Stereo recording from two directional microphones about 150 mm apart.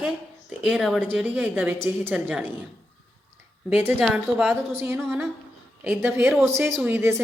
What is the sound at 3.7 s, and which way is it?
Speech, 10° right (ahead or behind).